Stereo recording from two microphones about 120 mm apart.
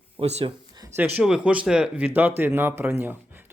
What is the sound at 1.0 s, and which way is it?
Speech, 15° right (ahead or behind).